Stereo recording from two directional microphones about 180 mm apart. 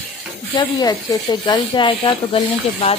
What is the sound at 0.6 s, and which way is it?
Speech, 20° left (ahead or behind).